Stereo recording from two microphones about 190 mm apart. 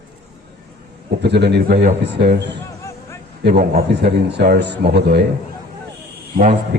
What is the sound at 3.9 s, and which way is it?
Speech, 60° right (ahead or behind).